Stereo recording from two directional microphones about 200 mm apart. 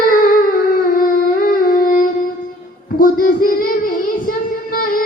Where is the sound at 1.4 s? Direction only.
45° left (ahead or behind).